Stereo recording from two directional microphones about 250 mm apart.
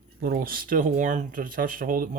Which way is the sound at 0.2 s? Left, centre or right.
Right.